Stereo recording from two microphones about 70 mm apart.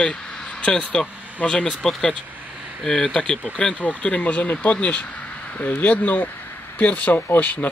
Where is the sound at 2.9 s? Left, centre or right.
Centre.